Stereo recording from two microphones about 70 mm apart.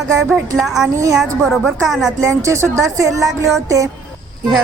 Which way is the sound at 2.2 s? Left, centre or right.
Right.